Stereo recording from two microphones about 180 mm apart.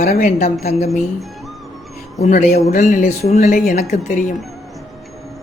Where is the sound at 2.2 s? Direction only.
40° left (ahead or behind).